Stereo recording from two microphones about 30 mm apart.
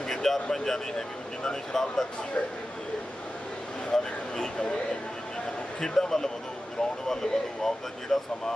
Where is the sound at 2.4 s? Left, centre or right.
Left.